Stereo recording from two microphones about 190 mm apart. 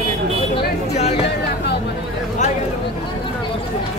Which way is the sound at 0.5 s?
35° left (ahead or behind).